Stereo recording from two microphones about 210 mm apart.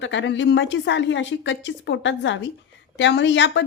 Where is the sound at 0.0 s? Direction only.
60° left (ahead or behind).